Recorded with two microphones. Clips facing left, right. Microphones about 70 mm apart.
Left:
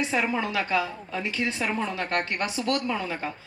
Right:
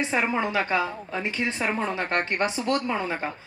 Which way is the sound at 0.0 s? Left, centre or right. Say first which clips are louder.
Right 1 dB; right.